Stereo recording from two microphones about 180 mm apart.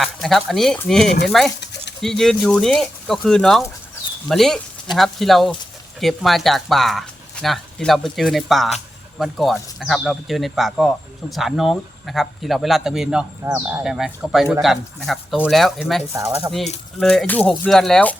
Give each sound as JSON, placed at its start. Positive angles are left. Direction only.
{"t": 0.0, "sound": "speech", "side_deg": 0}
{"t": 1.6, "sound": "a sound", "side_deg": 75}
{"t": 2.0, "sound": "speech", "side_deg": 0}
{"t": 16.1, "sound": "speech", "side_deg": -15}
{"t": 17.0, "sound": "speech", "side_deg": 5}